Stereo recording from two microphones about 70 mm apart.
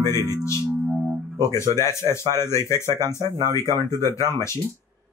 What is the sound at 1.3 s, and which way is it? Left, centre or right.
A man's voice, left.